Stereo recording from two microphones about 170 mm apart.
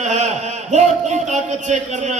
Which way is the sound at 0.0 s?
40° right (ahead or behind).